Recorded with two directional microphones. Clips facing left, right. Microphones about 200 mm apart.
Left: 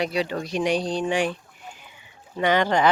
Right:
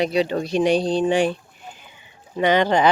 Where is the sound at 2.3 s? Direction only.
20° right (ahead or behind).